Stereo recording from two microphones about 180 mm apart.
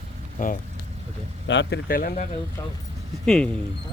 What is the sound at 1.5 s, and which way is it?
Speech, 80° left.